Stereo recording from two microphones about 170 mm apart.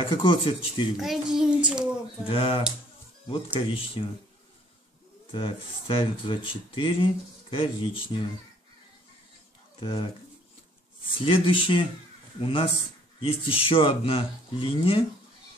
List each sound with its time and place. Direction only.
0.0 s speech: 30° left (ahead or behind)
0.9 s child singing: centre (ahead or behind)
2.2 s speech: 35° left (ahead or behind)
5.3 s speech: 30° left (ahead or behind)
9.8 s speech: 30° left (ahead or behind)
11.2 s speech: 30° left (ahead or behind)